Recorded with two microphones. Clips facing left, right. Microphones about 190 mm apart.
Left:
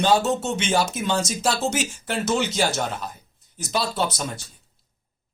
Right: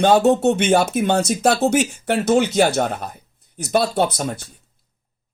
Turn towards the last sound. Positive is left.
turn(degrees=-55)  # may be behind; listen again after turning